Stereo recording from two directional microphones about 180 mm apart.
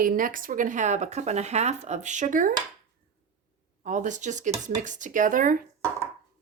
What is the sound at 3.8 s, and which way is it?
Speech, 45° right (ahead or behind).